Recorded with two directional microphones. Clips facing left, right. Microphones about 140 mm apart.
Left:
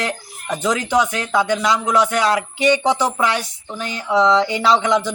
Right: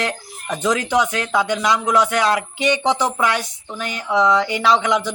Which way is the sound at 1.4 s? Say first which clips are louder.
Left 2 dB; 15° right (ahead or behind).